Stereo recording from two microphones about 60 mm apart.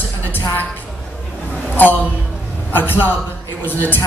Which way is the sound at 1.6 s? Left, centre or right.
Left.